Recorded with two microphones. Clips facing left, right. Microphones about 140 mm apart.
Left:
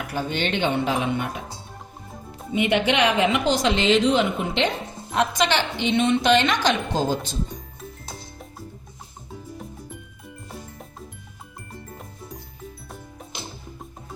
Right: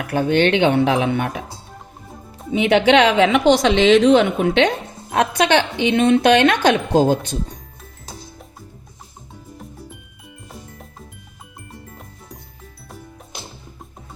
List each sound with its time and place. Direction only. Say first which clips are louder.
0.1 s speech: right 11 dB; 60° right (ahead or behind); by 1.3 s 80° right
2.5 s a woman's voice: right 7 dB; 90° right; by 7.3 s 60° right (ahead or behind)